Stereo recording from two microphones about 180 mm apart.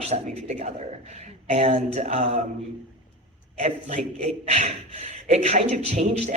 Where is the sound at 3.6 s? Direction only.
35° right (ahead or behind).